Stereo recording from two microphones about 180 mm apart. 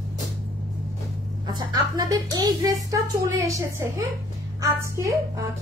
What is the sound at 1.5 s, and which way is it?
A woman's voice, 25° right (ahead or behind).